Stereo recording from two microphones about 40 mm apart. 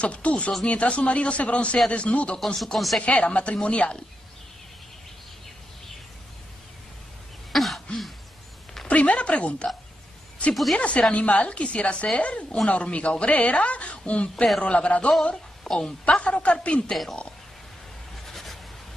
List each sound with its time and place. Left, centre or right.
0.0 s a woman's voice: left
2.4 s speech: centre
3.0 s a woman's voice: left
7.5 s throat clearing: centre
8.8 s speech: left
10.5 s speech: centre
10.8 s a woman's voice: left
15.6 s a woman's voice: centre
16.2 s a man's voice: left
18.2 s vehicle: centre